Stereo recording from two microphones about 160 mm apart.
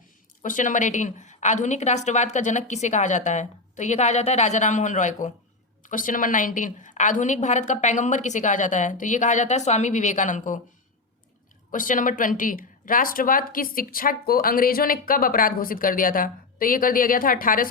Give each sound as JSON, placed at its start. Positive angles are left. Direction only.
{"t": 0.4, "sound": "a woman's voice", "side_deg": 55}
{"t": 11.7, "sound": "speech", "side_deg": 55}